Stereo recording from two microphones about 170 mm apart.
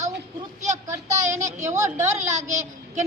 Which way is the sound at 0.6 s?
45° right (ahead or behind).